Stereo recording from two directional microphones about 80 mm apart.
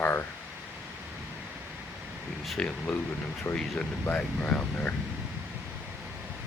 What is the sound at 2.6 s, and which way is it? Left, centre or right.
Speech, centre.